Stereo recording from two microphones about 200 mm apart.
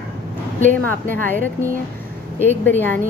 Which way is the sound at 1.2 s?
10° left (ahead or behind).